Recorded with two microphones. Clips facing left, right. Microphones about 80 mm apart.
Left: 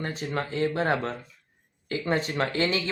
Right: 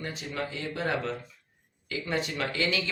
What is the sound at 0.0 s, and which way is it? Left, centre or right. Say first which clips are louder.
Speech: left 4 dB; left.